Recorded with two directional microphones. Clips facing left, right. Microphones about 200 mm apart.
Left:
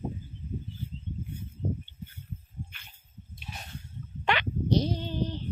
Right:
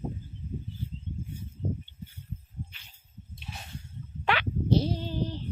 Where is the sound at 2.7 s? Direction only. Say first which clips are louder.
Left 2 dB; 55° left (ahead or behind).